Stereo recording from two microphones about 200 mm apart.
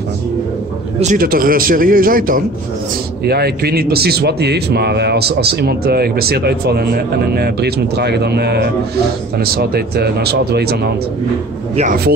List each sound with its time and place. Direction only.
0.9 s a man's voice: 40° right (ahead or behind)
11.7 s speech: 40° right (ahead or behind)